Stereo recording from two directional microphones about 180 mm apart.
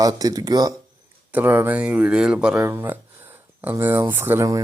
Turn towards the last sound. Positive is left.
turn(degrees=-15)  # may be behind; listen again after turning